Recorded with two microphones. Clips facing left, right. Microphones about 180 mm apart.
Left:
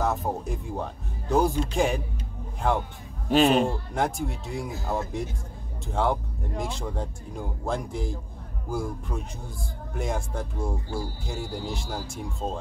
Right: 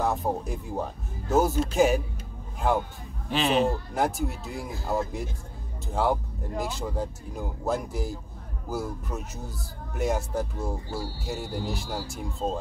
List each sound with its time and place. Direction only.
0.0 s speech: centre (ahead or behind)
3.3 s a man's voice: 45° left (ahead or behind)
3.6 s speech: centre (ahead or behind)